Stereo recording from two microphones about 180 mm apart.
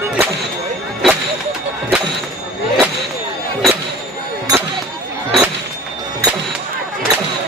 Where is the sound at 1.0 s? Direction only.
Centre (ahead or behind).